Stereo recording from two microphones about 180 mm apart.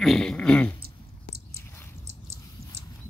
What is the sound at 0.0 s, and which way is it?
Speech, 5° left (ahead or behind).